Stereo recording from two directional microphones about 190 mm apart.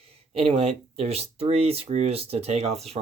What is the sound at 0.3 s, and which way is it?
Speech, 30° right (ahead or behind).